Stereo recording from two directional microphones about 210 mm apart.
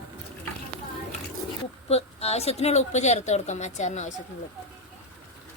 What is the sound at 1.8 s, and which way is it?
A woman's voice, 30° left (ahead or behind).